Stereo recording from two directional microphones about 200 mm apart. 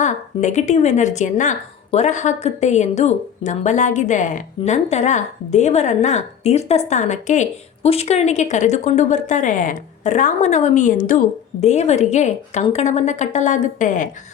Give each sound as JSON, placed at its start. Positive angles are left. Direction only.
{"t": 0.0, "sound": "a woman's voice", "side_deg": 35}